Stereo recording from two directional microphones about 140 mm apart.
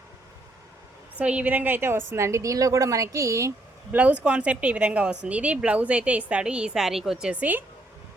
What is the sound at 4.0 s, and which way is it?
A woman's voice, 10° right (ahead or behind).